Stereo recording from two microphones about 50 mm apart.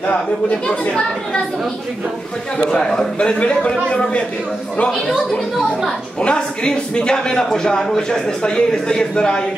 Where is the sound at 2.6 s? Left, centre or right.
Centre.